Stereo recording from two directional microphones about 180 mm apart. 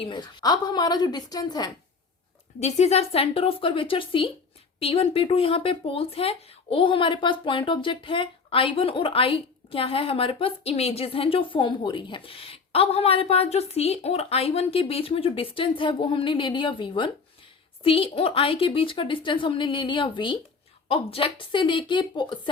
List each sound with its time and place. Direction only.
0.0 s a woman's voice: 25° left (ahead or behind)
2.6 s a woman's voice: 40° left (ahead or behind)